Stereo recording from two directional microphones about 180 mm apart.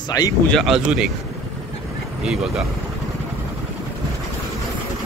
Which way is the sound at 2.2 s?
5° right (ahead or behind).